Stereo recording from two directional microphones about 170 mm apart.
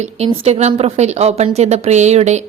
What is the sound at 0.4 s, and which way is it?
A woman's voice, 40° right (ahead or behind).